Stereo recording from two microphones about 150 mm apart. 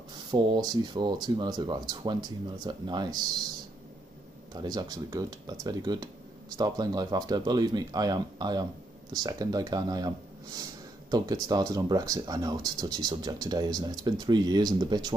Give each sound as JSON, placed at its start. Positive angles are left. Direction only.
{"t": 0.1, "sound": "speech", "side_deg": -30}
{"t": 4.6, "sound": "speech", "side_deg": -25}